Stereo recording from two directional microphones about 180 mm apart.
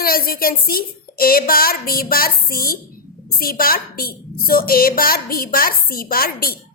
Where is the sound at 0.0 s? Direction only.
55° left (ahead or behind).